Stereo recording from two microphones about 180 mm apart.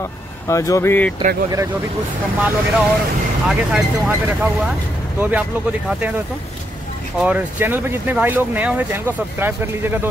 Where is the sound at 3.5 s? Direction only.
5° right (ahead or behind).